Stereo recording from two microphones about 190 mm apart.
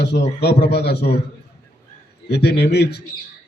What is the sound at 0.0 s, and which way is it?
A man's voice, 65° left (ahead or behind).